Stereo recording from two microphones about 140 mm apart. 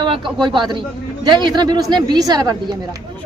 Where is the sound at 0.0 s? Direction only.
35° right (ahead or behind).